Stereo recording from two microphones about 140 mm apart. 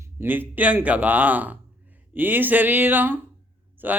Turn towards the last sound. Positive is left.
turn(degrees=-15)  # may be behind; listen again after turning